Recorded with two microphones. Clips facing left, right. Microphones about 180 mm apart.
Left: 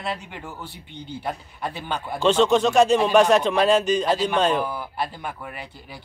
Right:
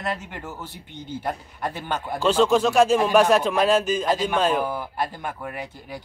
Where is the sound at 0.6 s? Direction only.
45° right (ahead or behind).